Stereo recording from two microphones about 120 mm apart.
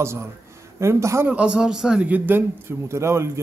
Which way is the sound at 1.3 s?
10° right (ahead or behind).